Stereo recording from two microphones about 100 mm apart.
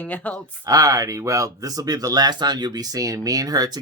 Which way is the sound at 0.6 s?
35° right (ahead or behind).